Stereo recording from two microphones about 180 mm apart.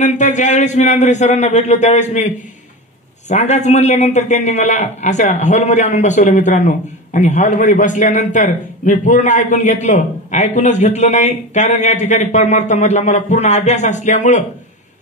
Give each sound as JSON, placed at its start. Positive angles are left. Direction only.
{"t": 0.0, "sound": "a man's voice", "side_deg": 40}